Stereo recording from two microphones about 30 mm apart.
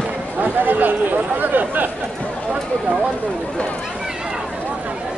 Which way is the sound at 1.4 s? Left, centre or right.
Right.